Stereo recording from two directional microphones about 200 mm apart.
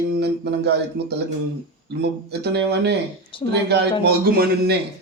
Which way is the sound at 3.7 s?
55° right (ahead or behind).